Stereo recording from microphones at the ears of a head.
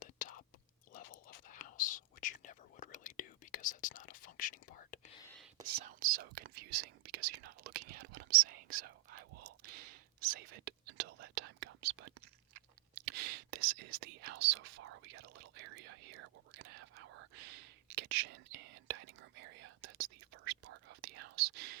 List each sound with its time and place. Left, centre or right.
0.0 s whispering: left
5.6 s whispering: right